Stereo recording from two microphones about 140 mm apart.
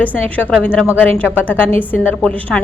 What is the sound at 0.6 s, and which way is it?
A woman's voice, 10° left (ahead or behind).